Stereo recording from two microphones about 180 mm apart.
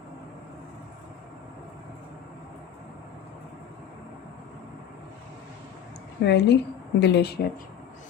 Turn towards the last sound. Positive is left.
turn(degrees=70)  # may be behind; listen again after turning